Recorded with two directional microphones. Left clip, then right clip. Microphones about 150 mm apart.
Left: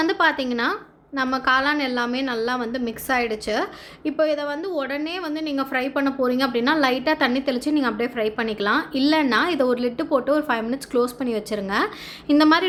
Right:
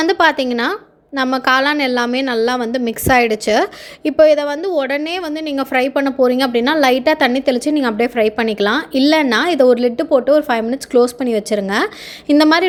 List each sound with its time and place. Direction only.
0.0 s a woman's voice: 45° right (ahead or behind)